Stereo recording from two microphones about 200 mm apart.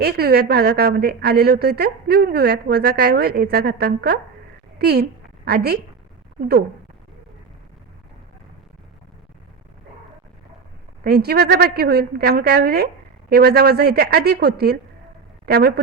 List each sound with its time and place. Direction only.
0.0 s a woman's voice: 50° right (ahead or behind)
11.0 s a woman's voice: 50° right (ahead or behind)